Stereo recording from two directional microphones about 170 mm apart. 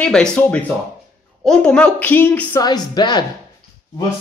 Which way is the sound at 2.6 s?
25° left (ahead or behind).